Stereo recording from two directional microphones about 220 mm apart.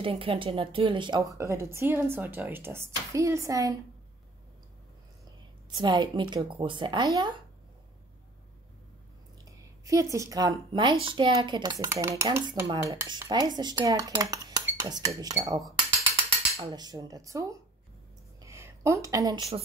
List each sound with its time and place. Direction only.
0.0 s a woman's voice: 25° right (ahead or behind)
5.8 s speech: 20° right (ahead or behind)
9.4 s a woman's voice: 15° right (ahead or behind)
14.3 s dishes: 15° right (ahead or behind)
15.1 s a woman's voice: 15° right (ahead or behind)
16.6 s a woman's voice: 15° right (ahead or behind)
18.4 s a sound: 15° right (ahead or behind)